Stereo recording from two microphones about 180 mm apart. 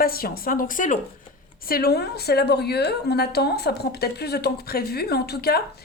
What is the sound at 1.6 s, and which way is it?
A woman's voice, 55° left (ahead or behind).